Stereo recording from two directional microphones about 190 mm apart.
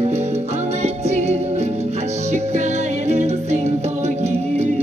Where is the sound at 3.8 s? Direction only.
35° right (ahead or behind).